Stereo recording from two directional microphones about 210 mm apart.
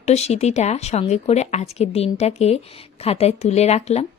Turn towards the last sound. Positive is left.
turn(degrees=30)  # may be behind; listen again after turning